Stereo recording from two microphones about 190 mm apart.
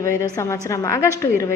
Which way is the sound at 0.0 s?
15° left (ahead or behind).